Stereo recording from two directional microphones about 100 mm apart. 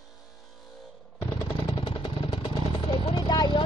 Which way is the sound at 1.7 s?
50° left (ahead or behind).